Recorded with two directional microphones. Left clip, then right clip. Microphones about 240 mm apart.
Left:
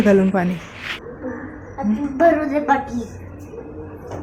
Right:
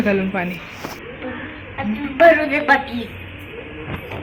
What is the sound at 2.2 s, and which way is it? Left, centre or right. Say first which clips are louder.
Music: right 4 dB; centre.